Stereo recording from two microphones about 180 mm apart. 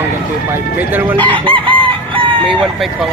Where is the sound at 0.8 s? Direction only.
10° right (ahead or behind).